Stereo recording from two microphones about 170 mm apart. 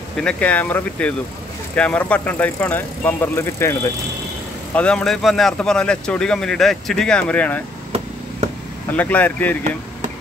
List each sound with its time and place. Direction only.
0.2 s speech: 5° left (ahead or behind)
4.7 s a man's voice: 5° left (ahead or behind)
8.9 s speech: 10° left (ahead or behind)